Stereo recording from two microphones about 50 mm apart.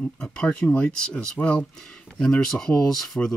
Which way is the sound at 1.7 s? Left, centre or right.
Centre.